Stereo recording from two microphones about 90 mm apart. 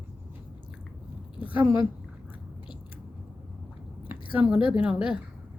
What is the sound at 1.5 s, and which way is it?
Speech, 70° left (ahead or behind).